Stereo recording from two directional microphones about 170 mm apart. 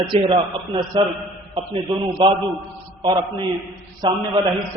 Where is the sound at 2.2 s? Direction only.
35° right (ahead or behind).